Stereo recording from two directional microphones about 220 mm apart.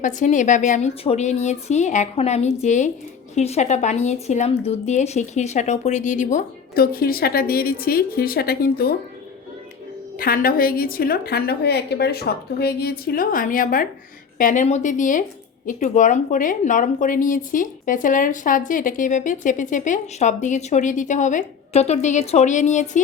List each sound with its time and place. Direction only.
0.0 s a woman's voice: 35° left (ahead or behind)
10.2 s a woman's voice: 40° left (ahead or behind)